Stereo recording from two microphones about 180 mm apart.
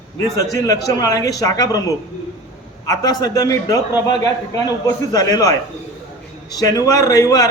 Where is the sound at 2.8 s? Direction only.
20° left (ahead or behind).